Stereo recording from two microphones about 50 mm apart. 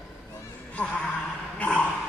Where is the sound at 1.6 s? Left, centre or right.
Left.